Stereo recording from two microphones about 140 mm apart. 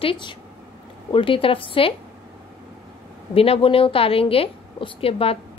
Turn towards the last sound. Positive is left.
turn(degrees=45)  # may be behind; listen again after turning